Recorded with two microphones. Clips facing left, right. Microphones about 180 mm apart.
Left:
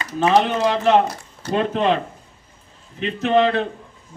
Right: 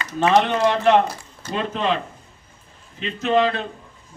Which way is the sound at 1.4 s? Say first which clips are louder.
Left 5 dB; 55° left (ahead or behind).